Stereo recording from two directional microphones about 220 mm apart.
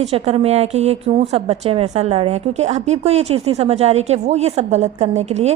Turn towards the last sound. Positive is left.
turn(degrees=-30)  # may be behind; listen again after turning